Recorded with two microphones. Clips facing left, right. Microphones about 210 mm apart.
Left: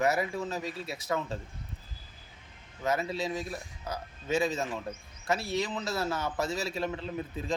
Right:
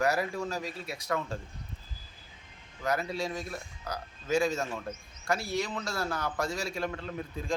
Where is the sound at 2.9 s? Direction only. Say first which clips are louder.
Left 1 dB; centre (ahead or behind).